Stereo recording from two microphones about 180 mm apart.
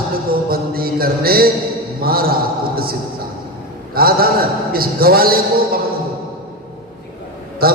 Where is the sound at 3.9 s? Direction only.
55° right (ahead or behind).